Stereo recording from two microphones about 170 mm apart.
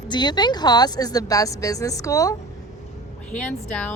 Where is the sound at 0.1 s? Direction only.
25° left (ahead or behind).